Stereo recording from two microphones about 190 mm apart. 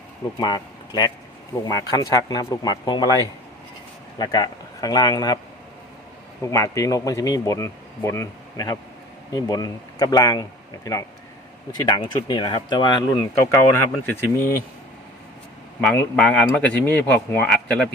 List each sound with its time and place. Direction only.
0.3 s speech: 20° left (ahead or behind)
4.2 s speech: 20° left (ahead or behind)
6.4 s speech: 15° left (ahead or behind)
11.7 s speech: 20° left (ahead or behind)
13.7 s speech: 10° left (ahead or behind)
15.8 s speech: 5° left (ahead or behind)